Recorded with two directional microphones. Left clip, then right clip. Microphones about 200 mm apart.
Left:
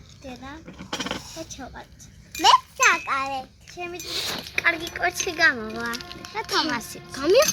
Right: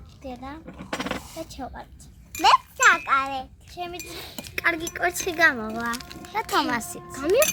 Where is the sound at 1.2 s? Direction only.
30° right (ahead or behind).